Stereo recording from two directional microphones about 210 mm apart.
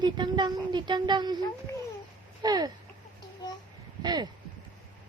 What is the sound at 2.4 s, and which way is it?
Speech, 20° right (ahead or behind).